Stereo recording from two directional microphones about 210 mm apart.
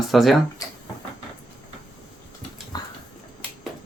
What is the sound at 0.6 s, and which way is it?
Drawer open or close, 15° left (ahead or behind).